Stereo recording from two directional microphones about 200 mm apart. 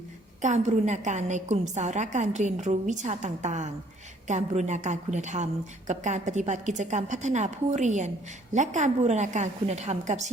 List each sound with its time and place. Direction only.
0.4 s a woman's voice: 35° right (ahead or behind)